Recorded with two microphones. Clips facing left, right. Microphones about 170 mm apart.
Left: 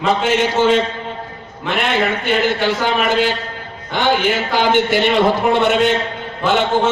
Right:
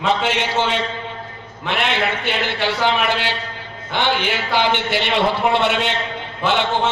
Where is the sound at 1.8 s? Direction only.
45° left (ahead or behind).